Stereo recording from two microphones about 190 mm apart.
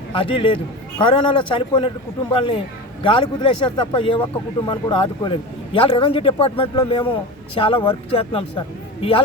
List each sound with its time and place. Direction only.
0.2 s a man's voice: 30° left (ahead or behind)